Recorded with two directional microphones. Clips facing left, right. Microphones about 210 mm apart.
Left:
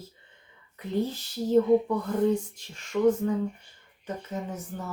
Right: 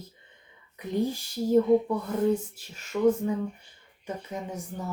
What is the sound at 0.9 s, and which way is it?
Speech, 15° right (ahead or behind).